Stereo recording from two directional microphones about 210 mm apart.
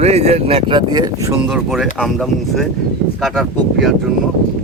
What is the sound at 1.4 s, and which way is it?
Speech, centre (ahead or behind).